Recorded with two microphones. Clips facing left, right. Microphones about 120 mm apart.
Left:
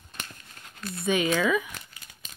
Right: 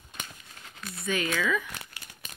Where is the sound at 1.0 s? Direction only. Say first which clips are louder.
Left 5 dB; 20° left (ahead or behind).